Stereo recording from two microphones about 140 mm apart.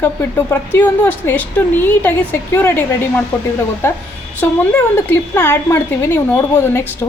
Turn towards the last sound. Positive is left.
turn(degrees=15)  # may be behind; listen again after turning